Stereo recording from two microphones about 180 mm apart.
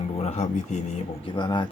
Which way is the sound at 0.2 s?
35° left (ahead or behind).